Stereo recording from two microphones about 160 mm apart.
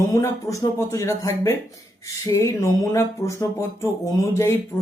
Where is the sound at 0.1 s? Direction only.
20° left (ahead or behind).